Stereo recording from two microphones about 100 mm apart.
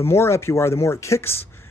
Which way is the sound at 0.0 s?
25° left (ahead or behind).